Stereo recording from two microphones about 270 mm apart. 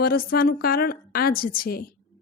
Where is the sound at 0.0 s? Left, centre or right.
Left.